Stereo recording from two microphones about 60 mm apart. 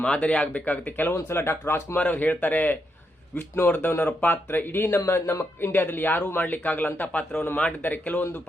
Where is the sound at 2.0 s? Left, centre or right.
Left.